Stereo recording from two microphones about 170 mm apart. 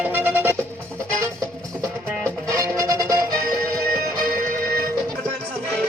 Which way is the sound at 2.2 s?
20° right (ahead or behind).